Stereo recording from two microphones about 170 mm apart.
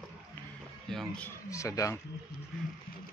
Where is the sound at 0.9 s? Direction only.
5° left (ahead or behind).